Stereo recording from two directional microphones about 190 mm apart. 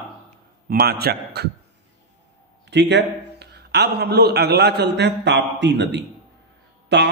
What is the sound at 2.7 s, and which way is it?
Speech, 65° right (ahead or behind).